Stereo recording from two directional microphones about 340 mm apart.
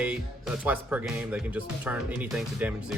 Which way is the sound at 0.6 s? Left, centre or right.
Centre.